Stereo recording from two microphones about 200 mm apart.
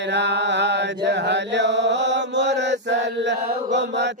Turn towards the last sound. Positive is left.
turn(degrees=-60)  # may be behind; listen again after turning